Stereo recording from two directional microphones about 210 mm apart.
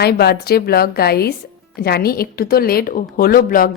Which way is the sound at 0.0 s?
50° left (ahead or behind).